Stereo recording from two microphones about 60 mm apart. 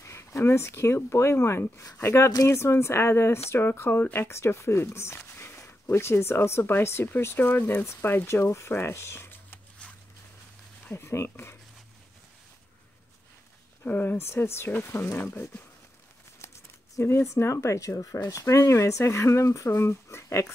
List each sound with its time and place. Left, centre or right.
0.0 s speech: left
8.3 s speech: left
10.9 s speech: left
13.8 s speech: left
14.1 s speech: left
15.2 s speech: left
19.7 s speech: left